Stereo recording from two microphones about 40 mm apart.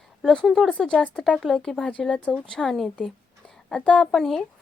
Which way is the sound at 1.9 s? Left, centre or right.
Left.